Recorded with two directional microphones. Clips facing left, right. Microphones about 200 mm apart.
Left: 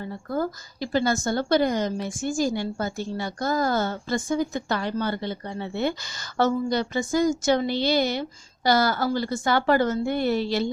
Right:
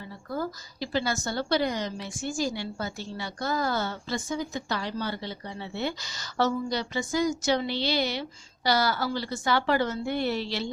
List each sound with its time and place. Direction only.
0.0 s a woman's voice: 50° left (ahead or behind)